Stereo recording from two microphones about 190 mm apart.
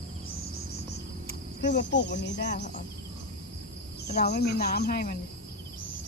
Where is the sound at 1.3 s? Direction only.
60° left (ahead or behind).